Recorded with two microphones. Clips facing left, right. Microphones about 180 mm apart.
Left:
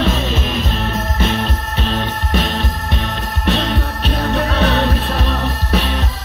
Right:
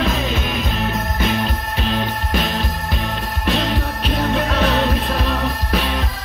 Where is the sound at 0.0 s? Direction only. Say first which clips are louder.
Left 2 dB; 25° left (ahead or behind).